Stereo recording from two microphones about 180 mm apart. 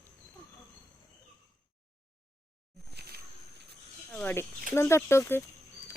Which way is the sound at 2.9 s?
60° right (ahead or behind).